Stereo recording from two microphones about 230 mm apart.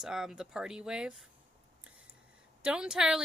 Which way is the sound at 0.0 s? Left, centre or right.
Centre.